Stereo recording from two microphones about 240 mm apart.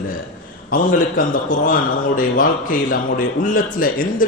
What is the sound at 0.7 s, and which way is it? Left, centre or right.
A man's voice, left.